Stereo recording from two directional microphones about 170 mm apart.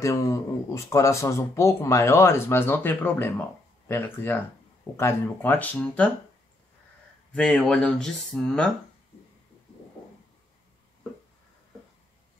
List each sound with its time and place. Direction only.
0.0 s speech: 20° left (ahead or behind)
7.3 s speech: 5° left (ahead or behind)